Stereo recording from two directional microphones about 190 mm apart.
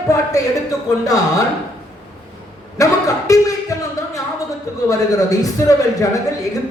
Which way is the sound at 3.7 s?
15° left (ahead or behind).